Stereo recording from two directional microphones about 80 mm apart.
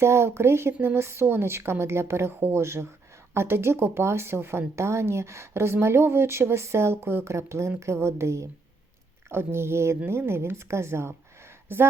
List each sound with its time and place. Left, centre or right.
0.0 s a woman's voice: right